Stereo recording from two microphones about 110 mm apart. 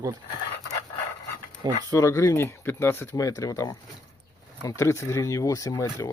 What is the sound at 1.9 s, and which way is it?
Speech, 30° left (ahead or behind).